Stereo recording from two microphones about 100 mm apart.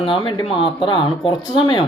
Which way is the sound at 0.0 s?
60° left (ahead or behind).